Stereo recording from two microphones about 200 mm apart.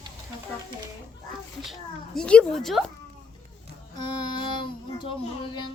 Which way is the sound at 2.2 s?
5° left (ahead or behind).